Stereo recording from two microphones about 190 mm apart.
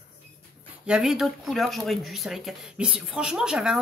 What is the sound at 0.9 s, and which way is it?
Speech, 5° right (ahead or behind).